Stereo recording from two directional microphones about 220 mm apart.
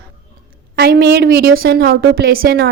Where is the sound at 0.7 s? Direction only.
45° right (ahead or behind).